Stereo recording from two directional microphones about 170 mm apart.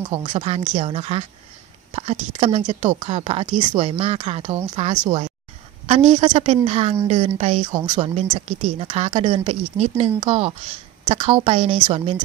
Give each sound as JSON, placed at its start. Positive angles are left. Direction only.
{"t": 0.1, "sound": "a woman's voice", "side_deg": -30}
{"t": 2.9, "sound": "speech", "side_deg": -35}
{"t": 7.7, "sound": "speech", "side_deg": -25}
{"t": 8.1, "sound": "speech", "side_deg": -40}